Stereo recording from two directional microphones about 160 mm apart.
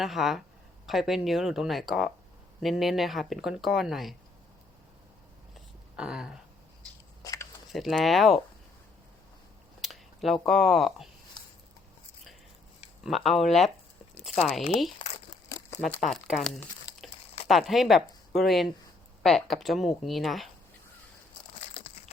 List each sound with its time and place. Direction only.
0.0 s speech: centre (ahead or behind)
6.0 s speech: 5° right (ahead or behind)
7.2 s a sound: 20° left (ahead or behind)
7.7 s speech: centre (ahead or behind)
9.8 s a sound: centre (ahead or behind)
10.4 s speech: centre (ahead or behind)
13.1 s speech: centre (ahead or behind)
14.9 s crumpling: 35° left (ahead or behind)
15.5 s crumpling: 20° left (ahead or behind)
16.0 s speech: centre (ahead or behind)
16.9 s a sound: 25° left (ahead or behind)
17.5 s speech: centre (ahead or behind)
21.5 s a sound: 35° left (ahead or behind)